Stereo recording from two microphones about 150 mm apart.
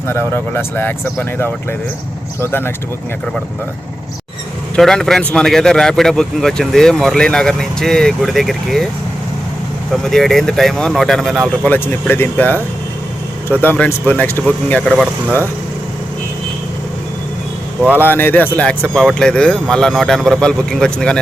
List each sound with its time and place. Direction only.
0.1 s speech: 15° left (ahead or behind)
4.8 s speech: 5° left (ahead or behind)
9.9 s speech: centre (ahead or behind)
17.9 s speech: 15° left (ahead or behind)